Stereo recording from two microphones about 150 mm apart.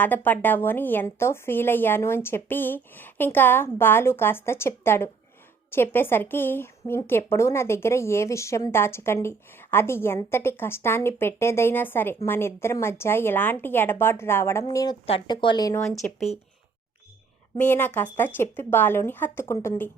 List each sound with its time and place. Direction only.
0.0 s a woman's voice: 10° left (ahead or behind); by 15.7 s 30° left (ahead or behind)
15.7 s speech: 15° left (ahead or behind)
17.6 s speech: 15° left (ahead or behind)